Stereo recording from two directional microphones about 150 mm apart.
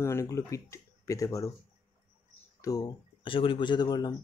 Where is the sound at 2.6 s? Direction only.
25° left (ahead or behind).